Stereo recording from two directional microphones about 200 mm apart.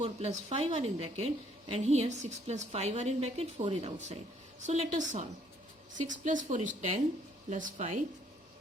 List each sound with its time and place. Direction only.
0.0 s a woman's voice: 30° right (ahead or behind)